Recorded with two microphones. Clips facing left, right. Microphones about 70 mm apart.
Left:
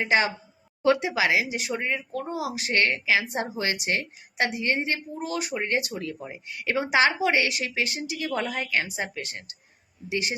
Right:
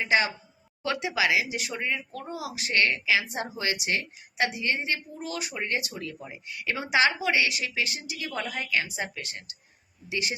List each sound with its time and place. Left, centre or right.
0.0 s speech: left
8.3 s speech: left